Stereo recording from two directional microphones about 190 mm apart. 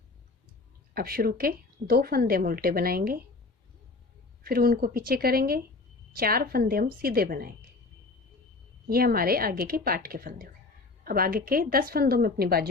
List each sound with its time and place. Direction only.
0.9 s a woman's voice: 50° right (ahead or behind)
4.4 s a woman's voice: 50° right (ahead or behind)
8.9 s a woman's voice: 50° right (ahead or behind)